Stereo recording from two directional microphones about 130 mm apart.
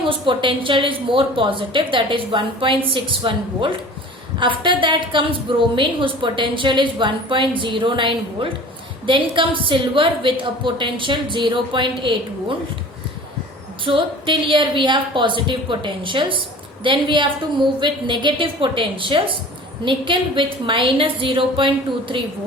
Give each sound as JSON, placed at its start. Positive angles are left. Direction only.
{"t": 0.1, "sound": "a woman's voice", "side_deg": -40}
{"t": 13.8, "sound": "a woman's voice", "side_deg": -40}